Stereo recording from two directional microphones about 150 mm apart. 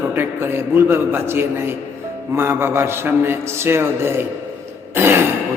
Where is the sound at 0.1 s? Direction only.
15° right (ahead or behind).